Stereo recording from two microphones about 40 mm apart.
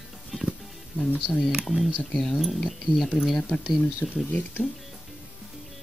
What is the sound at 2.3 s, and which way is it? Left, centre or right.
Speech, centre.